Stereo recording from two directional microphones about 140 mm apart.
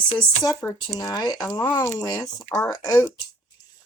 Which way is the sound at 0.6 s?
15° left (ahead or behind).